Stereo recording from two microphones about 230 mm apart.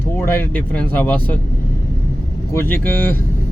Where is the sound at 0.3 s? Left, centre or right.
Centre.